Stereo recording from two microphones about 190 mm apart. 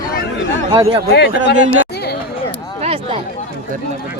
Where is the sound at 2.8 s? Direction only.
30° right (ahead or behind).